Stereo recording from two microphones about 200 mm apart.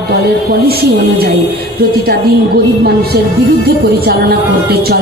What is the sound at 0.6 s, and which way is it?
Speech, 55° right (ahead or behind).